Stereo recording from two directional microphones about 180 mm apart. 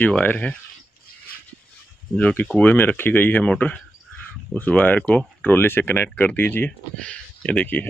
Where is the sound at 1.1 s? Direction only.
55° left (ahead or behind).